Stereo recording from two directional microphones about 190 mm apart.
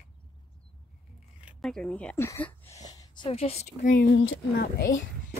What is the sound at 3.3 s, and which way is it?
Speech, 30° left (ahead or behind).